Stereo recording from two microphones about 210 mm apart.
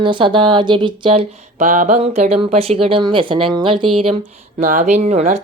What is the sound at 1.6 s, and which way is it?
Speech, 35° right (ahead or behind).